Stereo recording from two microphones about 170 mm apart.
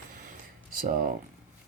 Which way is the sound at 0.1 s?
50° right (ahead or behind).